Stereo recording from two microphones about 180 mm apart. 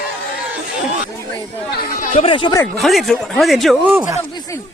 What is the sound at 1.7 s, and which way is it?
Speech, 60° left (ahead or behind).